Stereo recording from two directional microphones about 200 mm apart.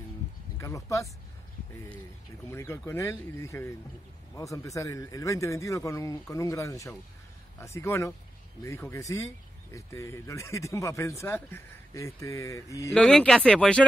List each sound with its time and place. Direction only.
0.6 s speech: 15° left (ahead or behind)
2.5 s speech: 15° left (ahead or behind)
12.9 s speech: 5° left (ahead or behind)